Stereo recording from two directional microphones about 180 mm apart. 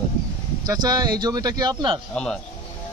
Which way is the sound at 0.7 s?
20° right (ahead or behind).